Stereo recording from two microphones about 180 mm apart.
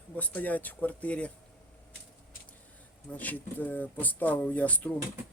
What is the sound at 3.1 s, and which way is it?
Speech, 10° left (ahead or behind).